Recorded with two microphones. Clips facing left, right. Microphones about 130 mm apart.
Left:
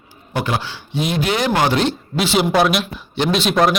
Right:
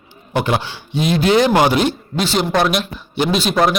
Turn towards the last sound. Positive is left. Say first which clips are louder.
# even
turn(degrees=0)  # may be behind; listen again after turning